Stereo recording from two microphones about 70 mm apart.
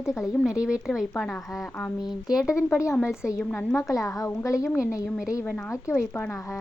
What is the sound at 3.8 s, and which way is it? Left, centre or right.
Speech, left.